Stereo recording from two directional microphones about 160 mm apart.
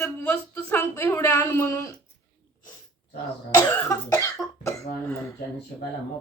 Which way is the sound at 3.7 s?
20° left (ahead or behind).